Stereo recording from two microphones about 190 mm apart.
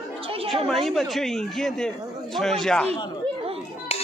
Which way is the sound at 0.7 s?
Centre (ahead or behind).